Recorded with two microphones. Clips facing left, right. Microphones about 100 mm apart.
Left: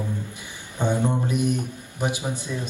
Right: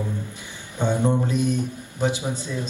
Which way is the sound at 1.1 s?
15° left (ahead or behind).